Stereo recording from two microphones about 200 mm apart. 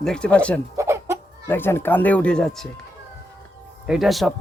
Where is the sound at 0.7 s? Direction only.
15° right (ahead or behind).